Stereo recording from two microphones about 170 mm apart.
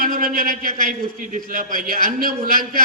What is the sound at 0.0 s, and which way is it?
A man's voice, 55° right (ahead or behind).